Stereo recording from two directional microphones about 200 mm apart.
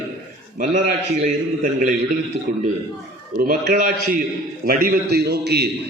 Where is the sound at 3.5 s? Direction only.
50° right (ahead or behind).